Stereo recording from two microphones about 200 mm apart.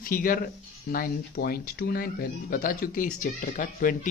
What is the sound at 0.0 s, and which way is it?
Speech, 45° left (ahead or behind).